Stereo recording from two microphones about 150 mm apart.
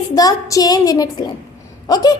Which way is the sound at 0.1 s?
25° left (ahead or behind).